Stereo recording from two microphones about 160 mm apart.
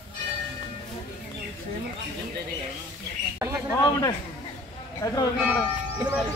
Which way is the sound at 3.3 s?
15° right (ahead or behind).